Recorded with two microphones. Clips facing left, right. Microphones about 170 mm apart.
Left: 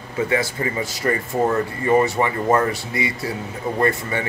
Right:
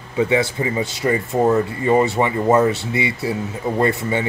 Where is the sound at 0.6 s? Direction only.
20° right (ahead or behind).